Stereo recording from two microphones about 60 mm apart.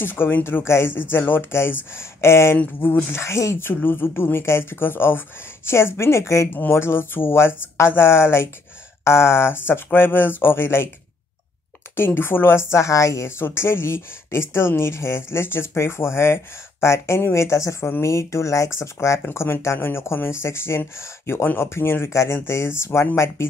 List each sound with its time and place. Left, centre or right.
0.0 s speech: left
3.6 s speech: left
6.7 s speech: left
12.0 s speech: left
13.4 s speech: left